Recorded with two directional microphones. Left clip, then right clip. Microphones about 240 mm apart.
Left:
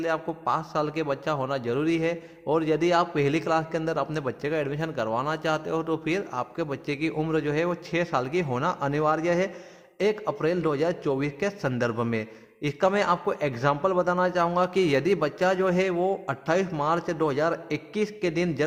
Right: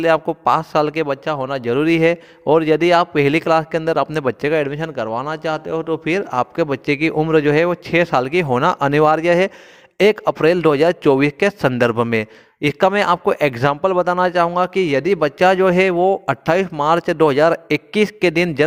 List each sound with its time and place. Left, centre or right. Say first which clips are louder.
0.0 s a man's voice: right 12 dB; right